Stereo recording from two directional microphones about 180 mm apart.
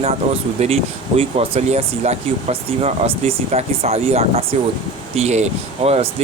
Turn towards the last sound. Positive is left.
turn(degrees=-35)  # may be behind; listen again after turning